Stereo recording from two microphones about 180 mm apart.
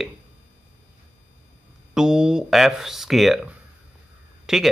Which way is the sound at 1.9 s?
5° right (ahead or behind).